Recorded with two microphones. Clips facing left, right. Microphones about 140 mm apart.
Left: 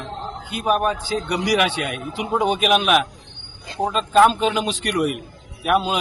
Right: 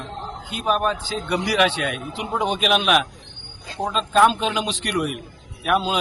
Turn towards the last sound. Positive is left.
turn(degrees=10)  # may be behind; listen again after turning